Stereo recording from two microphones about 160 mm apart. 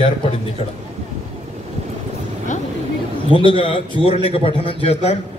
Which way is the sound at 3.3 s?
30° left (ahead or behind).